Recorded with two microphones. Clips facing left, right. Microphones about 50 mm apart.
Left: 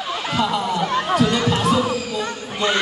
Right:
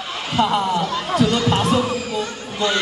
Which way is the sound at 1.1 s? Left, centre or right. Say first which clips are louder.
Right 2 dB; left.